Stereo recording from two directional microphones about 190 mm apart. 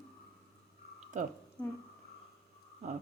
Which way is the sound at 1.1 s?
40° right (ahead or behind).